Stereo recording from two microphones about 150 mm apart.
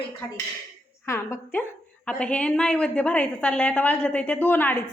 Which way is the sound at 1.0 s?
20° left (ahead or behind).